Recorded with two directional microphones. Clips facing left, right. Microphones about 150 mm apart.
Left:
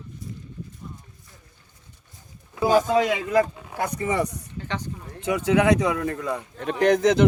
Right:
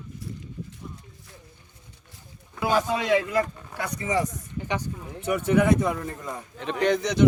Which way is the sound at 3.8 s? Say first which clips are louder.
Left 2 dB; 60° left (ahead or behind).